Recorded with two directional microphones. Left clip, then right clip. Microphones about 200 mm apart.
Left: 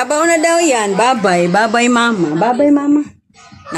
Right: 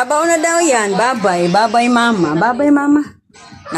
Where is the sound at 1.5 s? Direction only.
30° left (ahead or behind).